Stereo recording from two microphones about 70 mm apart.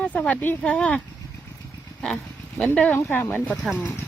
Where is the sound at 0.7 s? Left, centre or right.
Centre.